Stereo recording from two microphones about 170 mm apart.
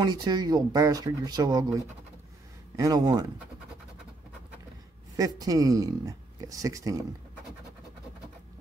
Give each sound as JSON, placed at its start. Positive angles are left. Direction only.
{"t": 0.0, "sound": "speech", "side_deg": -25}
{"t": 5.1, "sound": "speech", "side_deg": -20}